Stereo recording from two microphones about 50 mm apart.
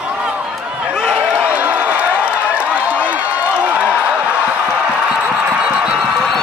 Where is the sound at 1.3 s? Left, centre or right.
Right.